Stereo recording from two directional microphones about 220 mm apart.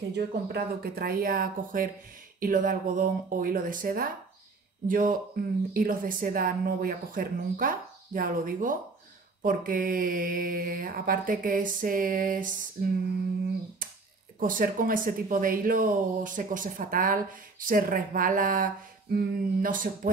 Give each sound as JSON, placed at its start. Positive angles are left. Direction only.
{"t": 0.1, "sound": "speech", "side_deg": -45}
{"t": 14.4, "sound": "speech", "side_deg": -40}